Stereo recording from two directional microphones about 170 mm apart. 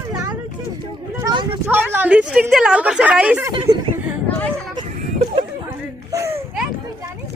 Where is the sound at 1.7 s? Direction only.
10° right (ahead or behind).